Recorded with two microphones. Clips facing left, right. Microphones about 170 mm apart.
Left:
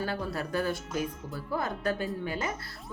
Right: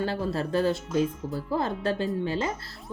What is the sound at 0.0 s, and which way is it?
Speech, 30° right (ahead or behind).